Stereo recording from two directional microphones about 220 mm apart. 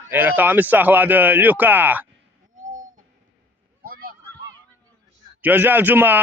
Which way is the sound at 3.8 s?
40° right (ahead or behind).